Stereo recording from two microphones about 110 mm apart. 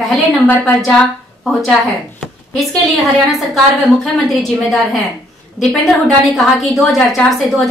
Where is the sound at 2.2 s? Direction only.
Centre (ahead or behind).